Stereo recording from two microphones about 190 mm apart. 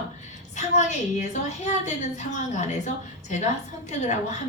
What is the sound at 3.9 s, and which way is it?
Speech, 40° left (ahead or behind).